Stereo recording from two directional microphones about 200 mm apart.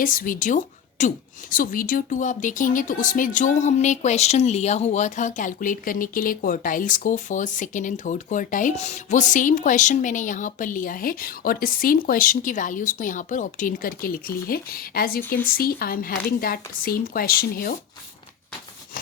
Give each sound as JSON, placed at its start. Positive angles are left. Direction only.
{"t": 0.0, "sound": "a woman's voice", "side_deg": 45}